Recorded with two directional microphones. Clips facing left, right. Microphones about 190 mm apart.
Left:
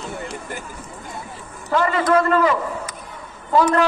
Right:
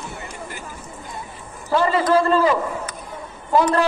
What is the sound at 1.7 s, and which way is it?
Speech, 30° right (ahead or behind).